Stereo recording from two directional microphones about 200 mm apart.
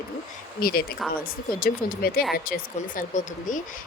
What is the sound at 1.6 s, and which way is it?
A woman's voice, 50° left (ahead or behind).